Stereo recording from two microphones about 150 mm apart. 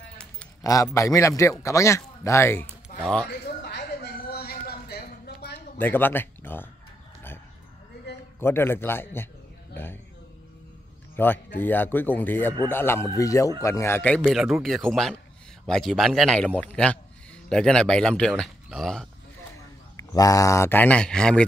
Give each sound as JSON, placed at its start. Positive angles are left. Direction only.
{"t": 0.9, "sound": "speech", "side_deg": 20}
{"t": 3.0, "sound": "speech", "side_deg": 5}
{"t": 3.6, "sound": "a sound", "side_deg": 90}
{"t": 5.8, "sound": "speech", "side_deg": 15}
{"t": 8.4, "sound": "speech", "side_deg": 15}
{"t": 11.1, "sound": "speech", "side_deg": 15}
{"t": 14.2, "sound": "a man's voice", "side_deg": 0}
{"t": 20.0, "sound": "speech", "side_deg": 25}